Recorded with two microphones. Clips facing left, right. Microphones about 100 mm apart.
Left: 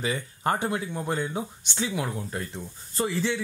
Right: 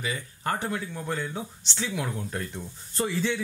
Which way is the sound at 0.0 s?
25° left (ahead or behind).